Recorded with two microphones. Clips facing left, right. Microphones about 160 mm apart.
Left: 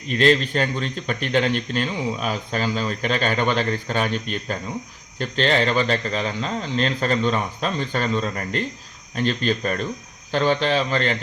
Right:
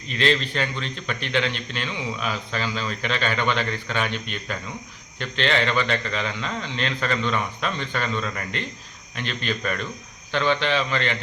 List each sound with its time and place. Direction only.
0.1 s a man's voice: 45° left (ahead or behind)